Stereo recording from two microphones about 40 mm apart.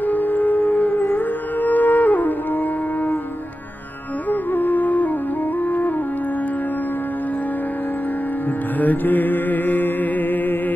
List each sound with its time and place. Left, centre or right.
0.0 s wind instrument: left
1.1 s music: left
4.3 s music: left
8.7 s music: left